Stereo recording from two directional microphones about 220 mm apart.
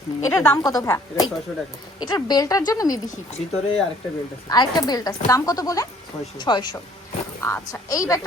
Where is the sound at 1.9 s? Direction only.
20° left (ahead or behind).